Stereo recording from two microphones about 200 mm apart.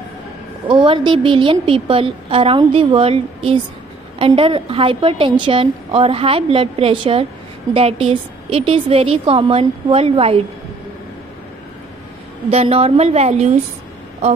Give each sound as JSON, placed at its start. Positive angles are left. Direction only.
{"t": 0.7, "sound": "a woman's voice", "side_deg": -25}
{"t": 12.4, "sound": "a woman's voice", "side_deg": -30}